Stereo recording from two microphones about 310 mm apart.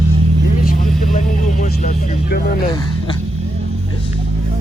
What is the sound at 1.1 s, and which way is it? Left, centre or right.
Speech, left.